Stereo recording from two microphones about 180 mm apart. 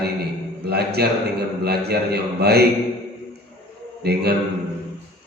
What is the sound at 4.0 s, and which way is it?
Speech, 65° right (ahead or behind).